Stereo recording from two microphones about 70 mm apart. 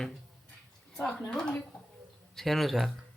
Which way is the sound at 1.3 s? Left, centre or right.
Centre.